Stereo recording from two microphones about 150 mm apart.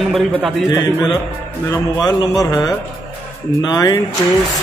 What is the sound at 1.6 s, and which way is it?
A man's voice, 20° left (ahead or behind).